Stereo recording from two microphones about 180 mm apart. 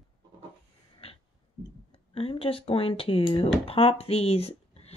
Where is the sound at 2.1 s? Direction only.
30° left (ahead or behind).